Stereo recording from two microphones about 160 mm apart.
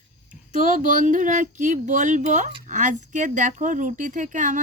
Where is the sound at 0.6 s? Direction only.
55° right (ahead or behind).